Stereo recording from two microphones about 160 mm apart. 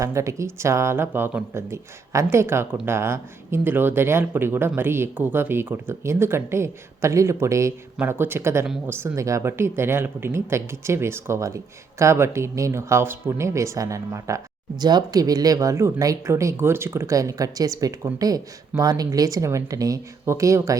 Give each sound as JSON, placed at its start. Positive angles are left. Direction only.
{"t": 0.0, "sound": "speech", "side_deg": -20}